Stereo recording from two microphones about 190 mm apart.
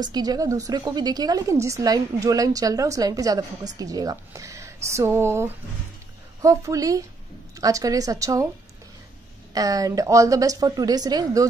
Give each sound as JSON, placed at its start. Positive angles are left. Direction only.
{"t": 0.0, "sound": "a woman's voice", "side_deg": -20}
{"t": 9.5, "sound": "a woman's voice", "side_deg": -20}